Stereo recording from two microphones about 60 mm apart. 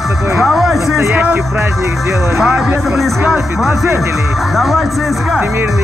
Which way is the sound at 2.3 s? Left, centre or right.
Centre.